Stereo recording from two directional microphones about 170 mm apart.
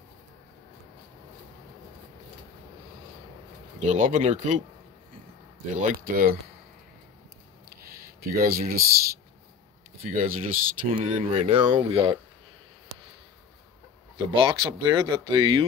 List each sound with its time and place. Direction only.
3.8 s speech: 45° right (ahead or behind)
5.8 s speech: 60° right (ahead or behind)
8.2 s speech: 60° right (ahead or behind)
10.0 s speech: 50° right (ahead or behind)
11.0 s speech: 35° right (ahead or behind)
14.1 s speech: 30° right (ahead or behind)